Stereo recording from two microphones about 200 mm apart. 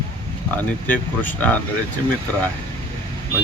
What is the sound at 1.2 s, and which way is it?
Speech, 10° left (ahead or behind).